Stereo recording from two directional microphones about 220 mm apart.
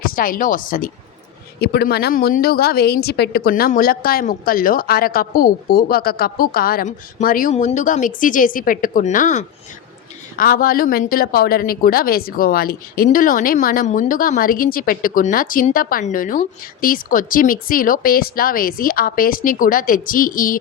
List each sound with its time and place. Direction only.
0.0 s speech: 40° left (ahead or behind)